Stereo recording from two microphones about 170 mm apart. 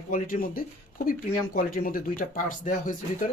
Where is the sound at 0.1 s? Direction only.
55° left (ahead or behind).